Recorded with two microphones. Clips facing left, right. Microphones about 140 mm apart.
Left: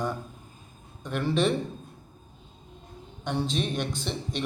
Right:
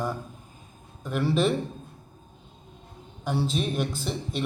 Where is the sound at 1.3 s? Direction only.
5° right (ahead or behind).